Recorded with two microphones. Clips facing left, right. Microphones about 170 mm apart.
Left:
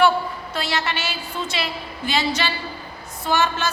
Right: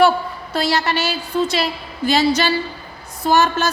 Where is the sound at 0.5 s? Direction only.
35° right (ahead or behind).